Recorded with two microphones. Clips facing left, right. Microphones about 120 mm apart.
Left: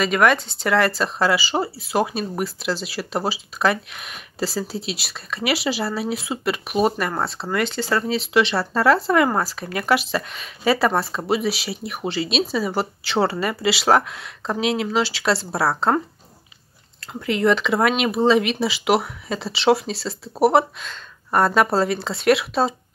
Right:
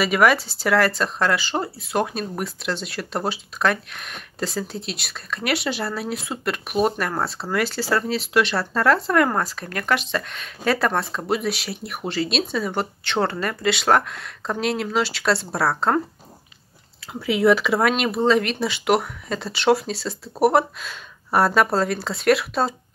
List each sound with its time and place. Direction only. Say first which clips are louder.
0.0 s speech: even; 5° right (ahead or behind)
17.0 s speech: right 1 dB; 5° right (ahead or behind)